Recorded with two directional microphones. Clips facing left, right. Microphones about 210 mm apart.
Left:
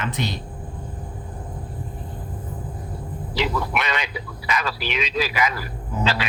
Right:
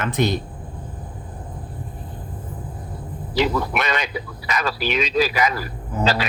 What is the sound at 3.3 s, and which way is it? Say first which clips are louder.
A man's voice: right 4 dB; 45° right (ahead or behind).